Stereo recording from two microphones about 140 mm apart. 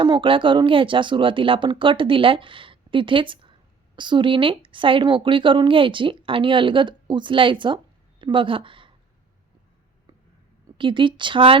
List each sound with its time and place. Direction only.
0.0 s speech: 35° right (ahead or behind)
10.8 s speech: 35° right (ahead or behind)